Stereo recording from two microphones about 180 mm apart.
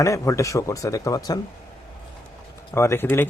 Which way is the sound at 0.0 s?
15° left (ahead or behind).